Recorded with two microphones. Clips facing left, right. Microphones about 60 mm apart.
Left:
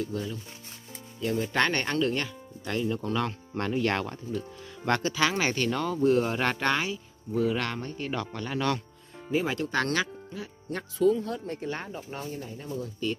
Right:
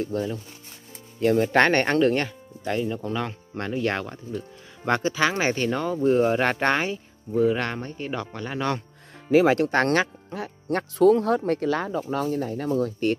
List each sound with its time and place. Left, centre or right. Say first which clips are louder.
0.0 s speech: right 5 dB; right
1.2 s speech: right 8 dB; right
2.6 s speech: right 3 dB; centre; by 7.0 s right
7.3 s speech: right 5 dB; right
9.3 s speech: right 10 dB; right
9.6 s speech: right 7 dB; right